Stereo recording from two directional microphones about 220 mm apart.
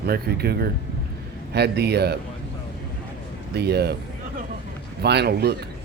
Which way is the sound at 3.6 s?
45° right (ahead or behind).